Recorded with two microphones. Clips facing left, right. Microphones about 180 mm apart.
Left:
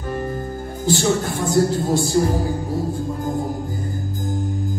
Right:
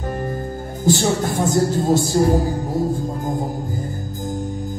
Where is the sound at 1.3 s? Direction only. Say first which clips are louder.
Even; 45° right (ahead or behind).